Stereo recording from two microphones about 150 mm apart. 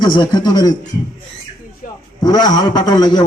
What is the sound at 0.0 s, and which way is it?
Speech, 30° left (ahead or behind).